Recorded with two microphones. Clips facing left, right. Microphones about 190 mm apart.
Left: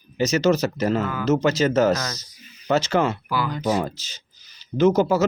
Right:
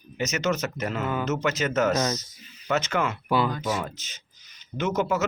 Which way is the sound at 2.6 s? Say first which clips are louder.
Left 5 dB; 30° left (ahead or behind).